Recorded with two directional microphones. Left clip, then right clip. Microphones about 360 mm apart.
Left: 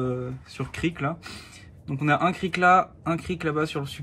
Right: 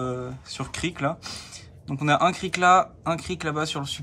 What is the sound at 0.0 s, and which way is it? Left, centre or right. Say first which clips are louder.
Speech: left 1 dB; centre.